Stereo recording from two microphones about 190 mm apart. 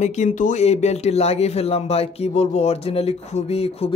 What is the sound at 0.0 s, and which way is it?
Speech, 40° left (ahead or behind).